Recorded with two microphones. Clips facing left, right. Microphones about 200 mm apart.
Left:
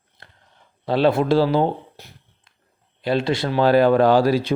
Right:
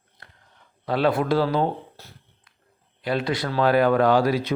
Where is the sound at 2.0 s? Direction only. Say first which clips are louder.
Left 2 dB; 15° left (ahead or behind).